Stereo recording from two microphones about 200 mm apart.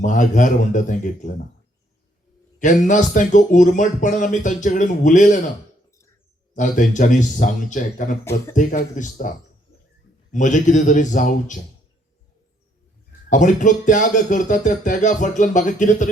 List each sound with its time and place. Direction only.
0.0 s speech: 40° left (ahead or behind)
2.6 s speech: 40° left (ahead or behind)
6.5 s speech: 40° left (ahead or behind)
8.2 s speech: 15° left (ahead or behind)
8.5 s speech: 40° left (ahead or behind)
10.3 s speech: 40° left (ahead or behind)
13.3 s speech: 40° left (ahead or behind)